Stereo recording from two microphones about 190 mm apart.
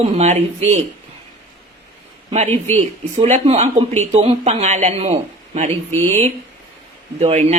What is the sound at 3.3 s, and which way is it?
Speech, 35° right (ahead or behind).